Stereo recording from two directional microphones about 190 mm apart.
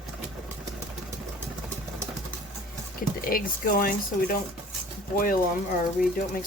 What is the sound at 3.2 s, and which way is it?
Speech, 50° left (ahead or behind).